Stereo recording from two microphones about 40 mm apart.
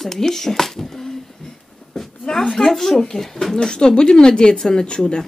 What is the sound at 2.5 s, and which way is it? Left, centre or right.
Speech, centre.